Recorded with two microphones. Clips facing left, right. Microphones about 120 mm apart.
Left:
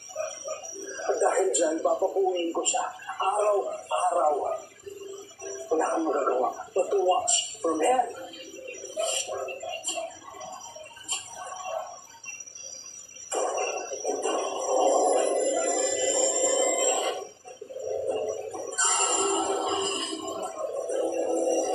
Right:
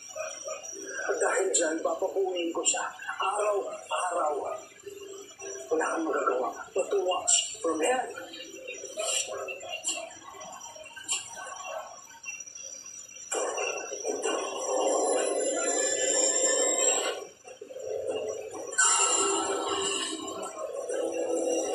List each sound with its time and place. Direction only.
0.9 s speech: 25° left (ahead or behind)
5.7 s speech: 25° left (ahead or behind)
8.6 s bird: 25° left (ahead or behind)
13.3 s a sound: 25° left (ahead or behind)